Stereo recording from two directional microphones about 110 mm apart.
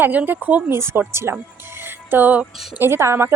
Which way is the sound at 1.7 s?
20° right (ahead or behind).